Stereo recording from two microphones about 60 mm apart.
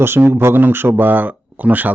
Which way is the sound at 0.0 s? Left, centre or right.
Right.